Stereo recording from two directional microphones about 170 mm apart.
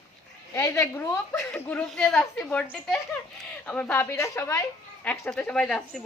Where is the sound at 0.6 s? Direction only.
15° left (ahead or behind).